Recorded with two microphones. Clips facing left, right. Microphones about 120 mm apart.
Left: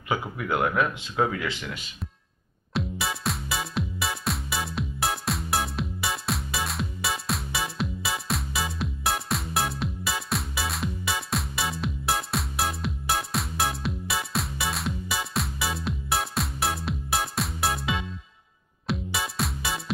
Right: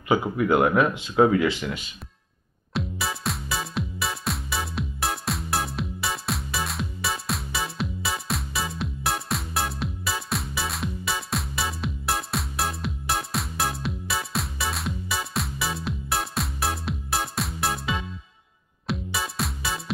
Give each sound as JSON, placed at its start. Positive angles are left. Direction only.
{"t": 0.2, "sound": "speech", "side_deg": -15}
{"t": 1.5, "sound": "speech", "side_deg": -5}
{"t": 2.7, "sound": "music", "side_deg": 0}
{"t": 19.1, "sound": "music", "side_deg": 0}